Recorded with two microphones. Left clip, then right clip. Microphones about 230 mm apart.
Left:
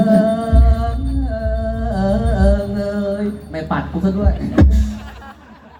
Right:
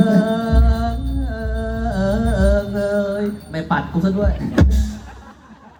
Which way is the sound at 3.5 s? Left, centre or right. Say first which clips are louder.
Right 1 dB; right.